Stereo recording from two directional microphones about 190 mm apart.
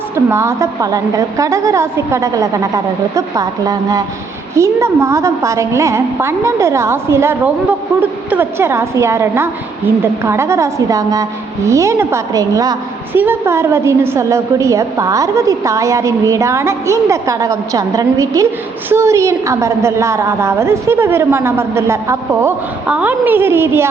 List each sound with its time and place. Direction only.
0.3 s a woman's voice: 15° right (ahead or behind)